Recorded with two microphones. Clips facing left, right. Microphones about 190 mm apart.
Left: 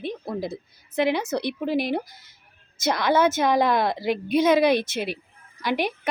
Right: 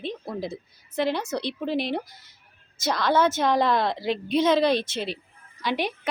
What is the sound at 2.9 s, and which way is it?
A woman's voice, 15° left (ahead or behind).